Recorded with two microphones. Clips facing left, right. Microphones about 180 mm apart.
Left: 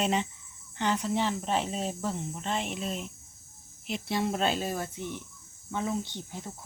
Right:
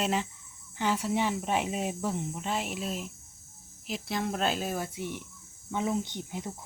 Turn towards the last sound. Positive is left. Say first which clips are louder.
# right 3 dB
turn(degrees=-15)  # may be behind; listen again after turning